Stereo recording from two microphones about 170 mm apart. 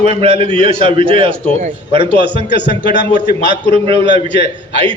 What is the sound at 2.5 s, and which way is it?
Speech, 90° left.